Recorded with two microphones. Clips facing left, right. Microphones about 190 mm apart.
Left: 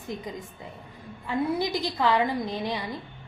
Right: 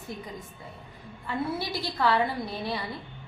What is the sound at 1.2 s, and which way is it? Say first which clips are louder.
A woman's voice: left 4 dB; 15° left (ahead or behind).